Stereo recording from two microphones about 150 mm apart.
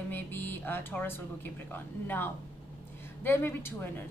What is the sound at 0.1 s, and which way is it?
A woman's voice, 15° left (ahead or behind).